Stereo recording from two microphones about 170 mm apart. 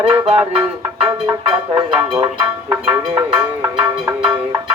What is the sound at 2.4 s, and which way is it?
Cowbell, 5° right (ahead or behind).